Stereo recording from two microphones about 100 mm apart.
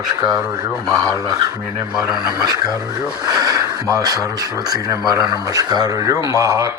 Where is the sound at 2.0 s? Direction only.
45° right (ahead or behind).